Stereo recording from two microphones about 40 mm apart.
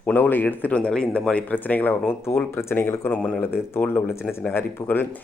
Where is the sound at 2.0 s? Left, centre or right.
Left.